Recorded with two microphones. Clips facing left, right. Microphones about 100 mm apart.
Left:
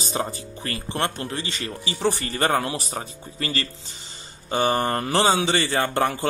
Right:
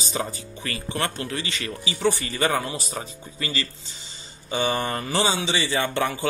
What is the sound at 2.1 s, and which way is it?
Speech, 55° left (ahead or behind).